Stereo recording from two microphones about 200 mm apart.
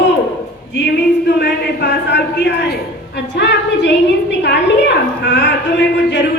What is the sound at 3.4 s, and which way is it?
Speech, 60° left (ahead or behind).